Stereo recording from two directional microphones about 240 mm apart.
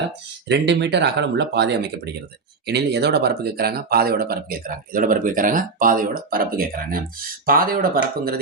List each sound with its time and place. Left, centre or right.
0.4 s speech: right